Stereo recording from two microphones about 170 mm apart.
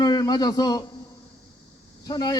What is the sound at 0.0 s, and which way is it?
Speech, 25° left (ahead or behind).